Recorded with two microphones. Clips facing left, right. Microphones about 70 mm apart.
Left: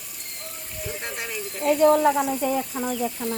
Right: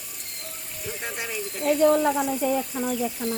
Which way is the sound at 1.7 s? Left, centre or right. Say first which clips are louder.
Left 2 dB; left.